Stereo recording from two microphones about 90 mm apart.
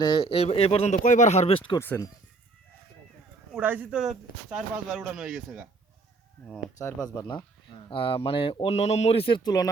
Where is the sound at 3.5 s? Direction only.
20° right (ahead or behind).